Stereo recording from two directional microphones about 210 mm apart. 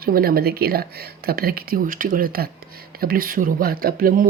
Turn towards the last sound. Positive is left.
turn(degrees=-45)  # may be behind; listen again after turning